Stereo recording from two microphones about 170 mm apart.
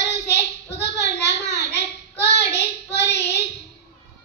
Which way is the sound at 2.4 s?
80° left.